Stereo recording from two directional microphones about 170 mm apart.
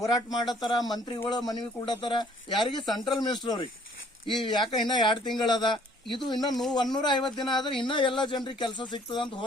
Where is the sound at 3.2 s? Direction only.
25° left (ahead or behind).